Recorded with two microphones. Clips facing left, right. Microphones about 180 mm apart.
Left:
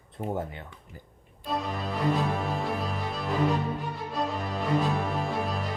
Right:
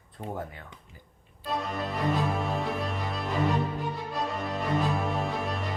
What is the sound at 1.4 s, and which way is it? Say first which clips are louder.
Music: even; centre (ahead or behind).